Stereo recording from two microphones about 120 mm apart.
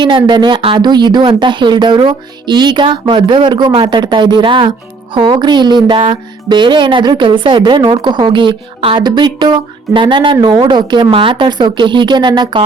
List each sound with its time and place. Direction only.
0.0 s speech: 40° right (ahead or behind)